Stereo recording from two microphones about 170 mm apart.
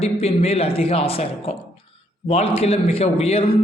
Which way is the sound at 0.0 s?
35° left (ahead or behind).